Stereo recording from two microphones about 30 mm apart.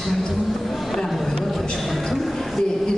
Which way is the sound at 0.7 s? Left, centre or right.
Centre.